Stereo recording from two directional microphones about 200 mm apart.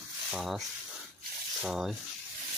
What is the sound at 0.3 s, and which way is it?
Speech, centre (ahead or behind).